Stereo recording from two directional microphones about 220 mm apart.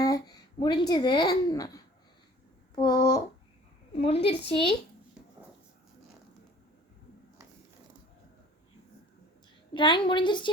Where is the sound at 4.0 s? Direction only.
25° left (ahead or behind).